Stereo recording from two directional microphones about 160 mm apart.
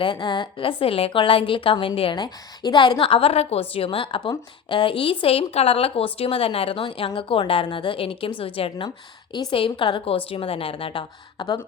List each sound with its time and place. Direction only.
0.0 s a woman's voice: 30° left (ahead or behind)